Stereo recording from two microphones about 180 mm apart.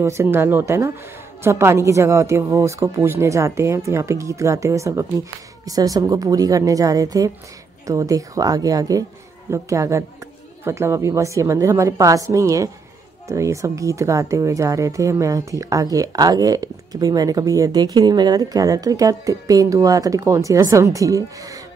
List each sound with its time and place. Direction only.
0.0 s a woman's voice: 15° right (ahead or behind)